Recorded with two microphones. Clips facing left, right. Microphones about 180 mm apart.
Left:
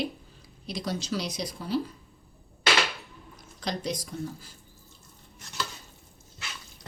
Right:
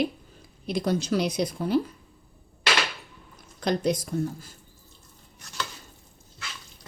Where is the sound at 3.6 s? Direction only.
55° right (ahead or behind).